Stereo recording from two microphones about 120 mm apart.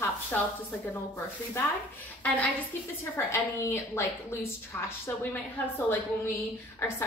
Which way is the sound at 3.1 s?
20° left (ahead or behind).